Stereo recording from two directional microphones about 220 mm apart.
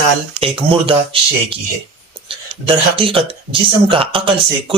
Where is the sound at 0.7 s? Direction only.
25° right (ahead or behind).